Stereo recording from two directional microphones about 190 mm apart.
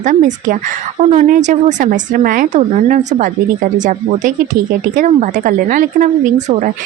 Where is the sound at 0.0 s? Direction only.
40° right (ahead or behind).